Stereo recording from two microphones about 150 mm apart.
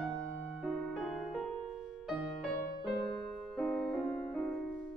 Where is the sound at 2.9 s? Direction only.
30° left (ahead or behind).